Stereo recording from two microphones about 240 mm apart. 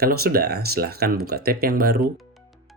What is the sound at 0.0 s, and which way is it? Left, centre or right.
Speech, right.